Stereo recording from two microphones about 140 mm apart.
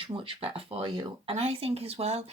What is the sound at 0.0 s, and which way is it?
Speech, 40° right (ahead or behind).